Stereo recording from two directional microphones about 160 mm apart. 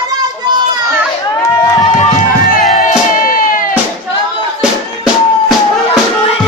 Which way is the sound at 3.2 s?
55° left (ahead or behind).